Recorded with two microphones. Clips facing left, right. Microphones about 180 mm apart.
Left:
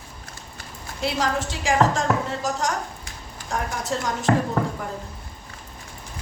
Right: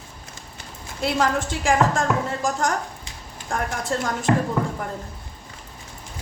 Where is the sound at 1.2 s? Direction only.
50° right (ahead or behind).